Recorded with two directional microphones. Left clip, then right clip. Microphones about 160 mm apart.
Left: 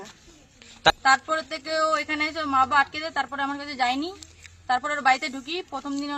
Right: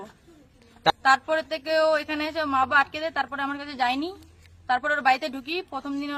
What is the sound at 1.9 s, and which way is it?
Speech, 15° right (ahead or behind).